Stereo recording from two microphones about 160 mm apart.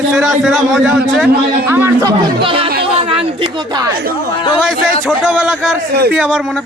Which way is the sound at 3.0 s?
35° right (ahead or behind).